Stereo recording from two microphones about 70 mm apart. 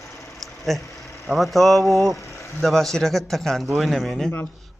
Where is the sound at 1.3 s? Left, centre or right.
Centre.